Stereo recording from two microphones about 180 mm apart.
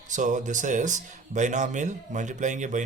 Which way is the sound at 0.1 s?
45° right (ahead or behind).